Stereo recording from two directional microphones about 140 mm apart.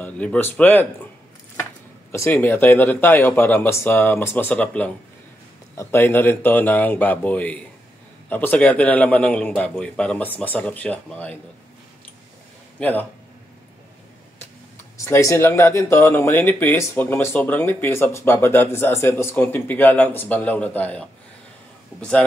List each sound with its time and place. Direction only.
0.0 s speech: 10° left (ahead or behind)
2.1 s speech: 15° left (ahead or behind)
12.7 s a man's voice: 10° left (ahead or behind)
15.0 s speech: 20° left (ahead or behind)